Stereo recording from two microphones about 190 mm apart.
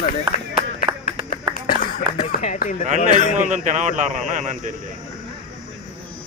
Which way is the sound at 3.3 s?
40° right (ahead or behind).